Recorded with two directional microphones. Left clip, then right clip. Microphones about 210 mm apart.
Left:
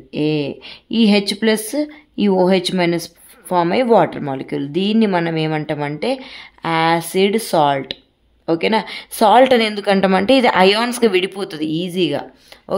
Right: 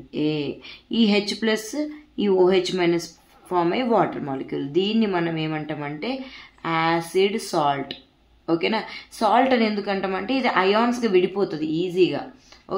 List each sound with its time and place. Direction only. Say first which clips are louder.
0.1 s a woman's voice: left 6 dB; 40° left (ahead or behind)